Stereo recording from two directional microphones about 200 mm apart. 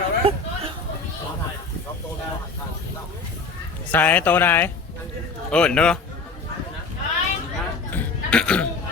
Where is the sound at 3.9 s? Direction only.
10° left (ahead or behind).